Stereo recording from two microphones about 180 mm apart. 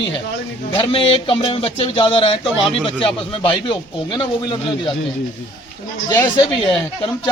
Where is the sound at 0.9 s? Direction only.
30° left (ahead or behind).